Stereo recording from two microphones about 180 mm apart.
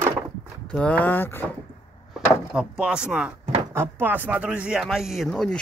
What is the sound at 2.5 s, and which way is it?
Speech, 5° right (ahead or behind).